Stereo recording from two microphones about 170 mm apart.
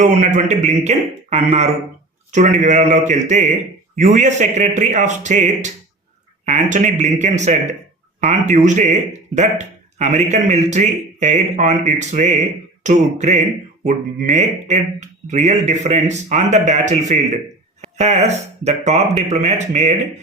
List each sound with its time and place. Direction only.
0.0 s speech: 45° right (ahead or behind)